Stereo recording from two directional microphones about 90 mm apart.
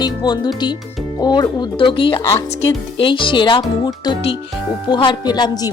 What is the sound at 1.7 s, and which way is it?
Speech, 70° left (ahead or behind).